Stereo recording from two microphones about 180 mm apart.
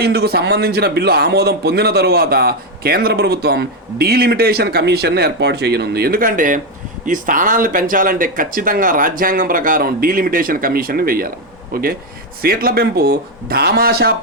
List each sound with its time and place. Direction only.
0.0 s a man's voice: 60° right (ahead or behind)